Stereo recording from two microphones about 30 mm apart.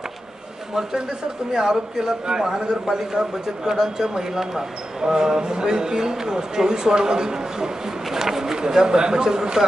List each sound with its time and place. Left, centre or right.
1.5 s speech: right